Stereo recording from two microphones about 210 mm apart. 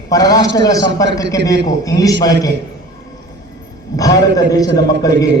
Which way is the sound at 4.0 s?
15° left (ahead or behind).